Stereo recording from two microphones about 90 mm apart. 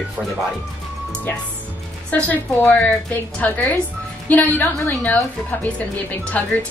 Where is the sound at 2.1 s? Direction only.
15° left (ahead or behind).